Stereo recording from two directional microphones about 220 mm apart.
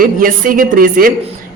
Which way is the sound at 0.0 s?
40° right (ahead or behind).